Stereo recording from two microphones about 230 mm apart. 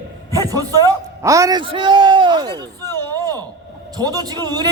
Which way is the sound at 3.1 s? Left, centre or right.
Centre.